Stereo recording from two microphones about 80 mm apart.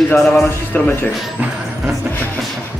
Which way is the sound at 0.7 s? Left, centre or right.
Left.